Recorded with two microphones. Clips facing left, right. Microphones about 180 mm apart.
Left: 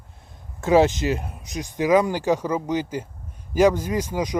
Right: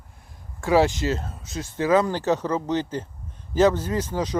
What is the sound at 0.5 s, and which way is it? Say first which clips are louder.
Speech: left 2 dB; 20° left (ahead or behind).